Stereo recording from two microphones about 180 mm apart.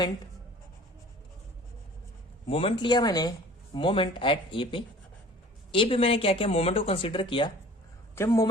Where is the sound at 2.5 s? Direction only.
30° left (ahead or behind).